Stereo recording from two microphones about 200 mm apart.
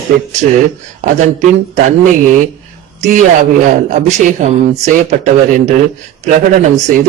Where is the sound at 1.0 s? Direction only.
35° right (ahead or behind).